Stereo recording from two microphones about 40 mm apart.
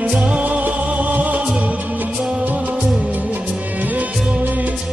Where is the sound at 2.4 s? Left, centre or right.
Right.